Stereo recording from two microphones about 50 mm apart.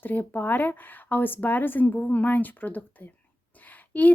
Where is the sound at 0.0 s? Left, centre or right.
Left.